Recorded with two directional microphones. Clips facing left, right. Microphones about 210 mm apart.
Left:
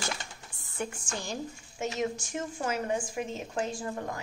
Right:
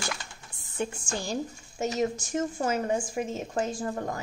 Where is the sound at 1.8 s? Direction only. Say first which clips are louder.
Right 4 dB; 40° right (ahead or behind).